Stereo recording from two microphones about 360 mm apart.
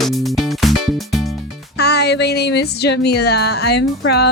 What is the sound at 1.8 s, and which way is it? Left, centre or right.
Speech, left.